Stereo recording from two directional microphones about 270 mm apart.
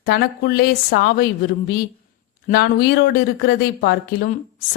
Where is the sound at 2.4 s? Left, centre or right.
Left.